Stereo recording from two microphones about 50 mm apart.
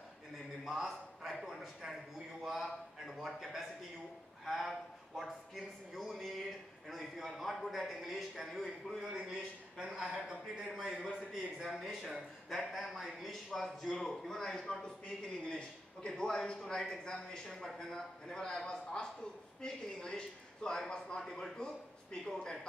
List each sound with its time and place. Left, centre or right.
0.7 s a man's voice: centre
4.5 s a sound: centre
8.9 s a man's voice: centre
11.8 s a man's voice: centre